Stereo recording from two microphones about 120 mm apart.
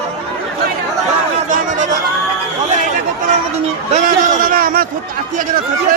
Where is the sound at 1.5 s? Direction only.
90° right.